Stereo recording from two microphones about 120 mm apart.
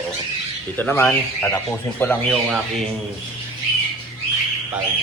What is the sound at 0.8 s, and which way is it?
Speech, 15° left (ahead or behind).